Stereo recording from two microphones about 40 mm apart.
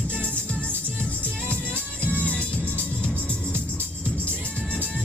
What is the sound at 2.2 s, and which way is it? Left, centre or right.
Music, left.